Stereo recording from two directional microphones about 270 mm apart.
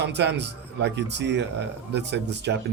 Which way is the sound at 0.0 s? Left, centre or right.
Right.